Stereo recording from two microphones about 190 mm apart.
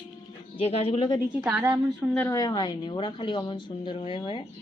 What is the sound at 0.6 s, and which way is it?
Speech, 30° left (ahead or behind).